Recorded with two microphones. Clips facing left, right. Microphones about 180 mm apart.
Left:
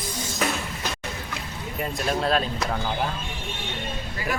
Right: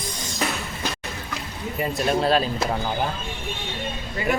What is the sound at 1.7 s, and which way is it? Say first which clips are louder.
Speech: right 4 dB; 5° right (ahead or behind).